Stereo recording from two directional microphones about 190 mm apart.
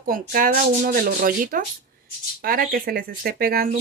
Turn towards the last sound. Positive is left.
turn(degrees=-50)  # may be behind; listen again after turning